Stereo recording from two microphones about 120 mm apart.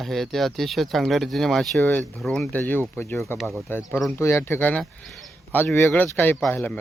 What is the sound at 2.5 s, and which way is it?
Speech, 15° left (ahead or behind).